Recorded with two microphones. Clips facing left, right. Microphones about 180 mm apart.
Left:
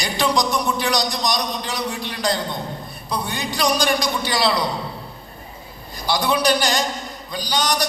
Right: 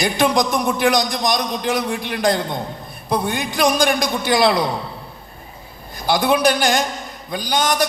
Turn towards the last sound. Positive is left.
turn(degrees=-50)  # may be behind; listen again after turning